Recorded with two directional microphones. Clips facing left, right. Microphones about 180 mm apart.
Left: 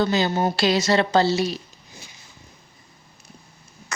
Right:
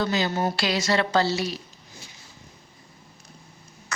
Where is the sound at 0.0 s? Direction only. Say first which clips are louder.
Left 4 dB; 25° left (ahead or behind).